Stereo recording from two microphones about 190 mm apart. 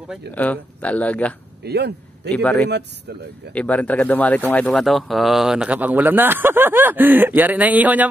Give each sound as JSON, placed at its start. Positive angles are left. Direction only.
{"t": 0.3, "sound": "speech", "side_deg": 10}
{"t": 1.6, "sound": "speech", "side_deg": -60}
{"t": 2.3, "sound": "speech", "side_deg": 5}